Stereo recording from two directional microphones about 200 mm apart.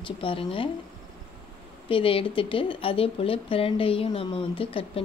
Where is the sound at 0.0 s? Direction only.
25° left (ahead or behind).